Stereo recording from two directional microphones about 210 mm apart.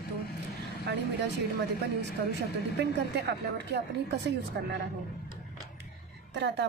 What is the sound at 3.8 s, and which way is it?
Speech, 50° right (ahead or behind).